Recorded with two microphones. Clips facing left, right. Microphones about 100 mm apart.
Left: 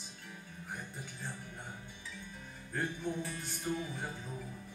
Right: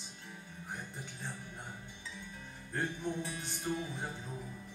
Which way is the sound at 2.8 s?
20° right (ahead or behind).